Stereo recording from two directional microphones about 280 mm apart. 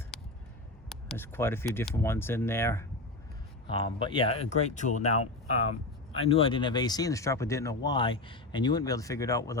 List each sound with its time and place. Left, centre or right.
0.9 s speech: centre; by 5.1 s left
6.1 s speech: centre